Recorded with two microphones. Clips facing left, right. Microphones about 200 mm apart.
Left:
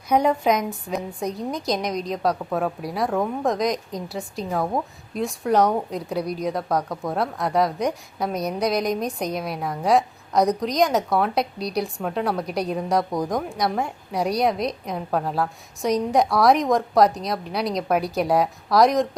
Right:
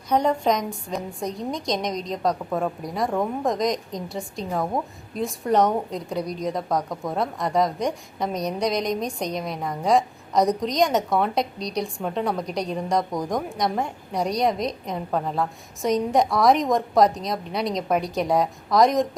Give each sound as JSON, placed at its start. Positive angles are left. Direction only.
{"t": 0.1, "sound": "a woman's voice", "side_deg": 10}